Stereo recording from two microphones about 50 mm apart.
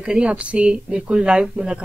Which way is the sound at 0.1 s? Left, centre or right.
Right.